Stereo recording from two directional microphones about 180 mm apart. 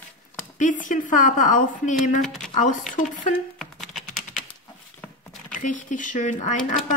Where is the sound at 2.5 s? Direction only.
45° left (ahead or behind).